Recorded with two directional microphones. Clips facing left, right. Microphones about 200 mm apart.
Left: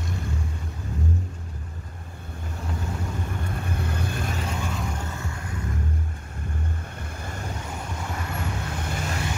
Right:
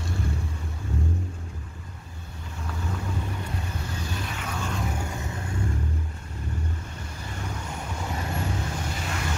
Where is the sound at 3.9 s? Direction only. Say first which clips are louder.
Left 4 dB; 55° left (ahead or behind).